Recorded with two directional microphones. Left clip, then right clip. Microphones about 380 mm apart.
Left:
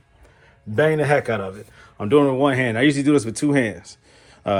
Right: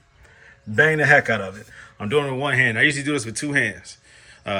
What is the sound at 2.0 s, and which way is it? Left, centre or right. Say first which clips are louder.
Speech: left 5 dB; centre.